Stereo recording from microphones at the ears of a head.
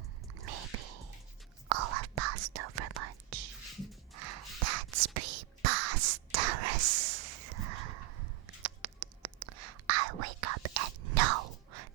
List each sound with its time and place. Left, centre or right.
0.3 s whispering: right